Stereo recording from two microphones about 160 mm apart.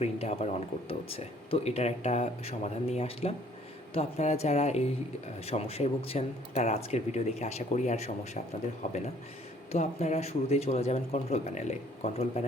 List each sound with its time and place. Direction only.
0.0 s speech: 40° left (ahead or behind)